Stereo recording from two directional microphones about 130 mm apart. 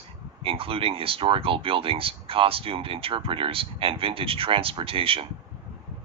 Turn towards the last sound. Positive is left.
turn(degrees=-45)  # may be behind; listen again after turning